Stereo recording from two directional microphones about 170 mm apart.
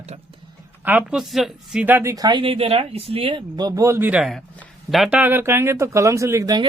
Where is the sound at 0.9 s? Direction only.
5° right (ahead or behind).